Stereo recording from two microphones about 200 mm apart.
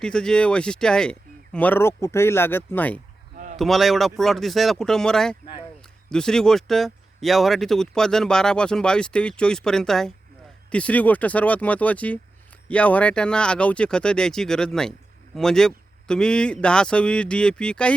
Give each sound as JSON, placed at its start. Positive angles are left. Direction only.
{"t": 0.0, "sound": "speech", "side_deg": 5}
{"t": 3.3, "sound": "a sound", "side_deg": -40}
{"t": 3.6, "sound": "speech", "side_deg": 0}